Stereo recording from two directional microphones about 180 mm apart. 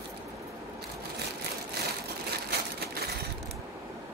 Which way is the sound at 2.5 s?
65° right (ahead or behind).